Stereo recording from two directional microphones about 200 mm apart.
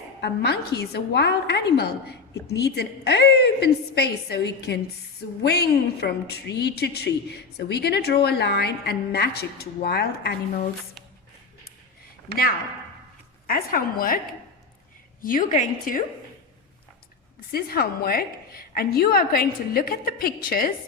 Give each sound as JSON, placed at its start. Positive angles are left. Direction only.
{"t": 0.2, "sound": "a woman's voice", "side_deg": 55}
{"t": 13.5, "sound": "speech", "side_deg": 45}
{"t": 15.2, "sound": "a woman's voice", "side_deg": 40}
{"t": 17.5, "sound": "speech", "side_deg": 50}